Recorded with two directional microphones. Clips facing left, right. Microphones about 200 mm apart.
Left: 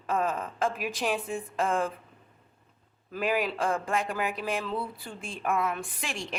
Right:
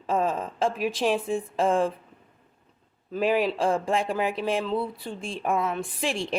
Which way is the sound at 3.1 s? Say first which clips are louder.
Right 5 dB; 30° right (ahead or behind).